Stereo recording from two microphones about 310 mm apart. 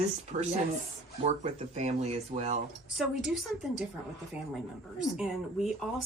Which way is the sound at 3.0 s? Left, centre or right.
Centre.